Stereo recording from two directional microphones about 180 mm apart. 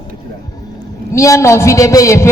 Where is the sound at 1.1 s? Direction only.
15° left (ahead or behind).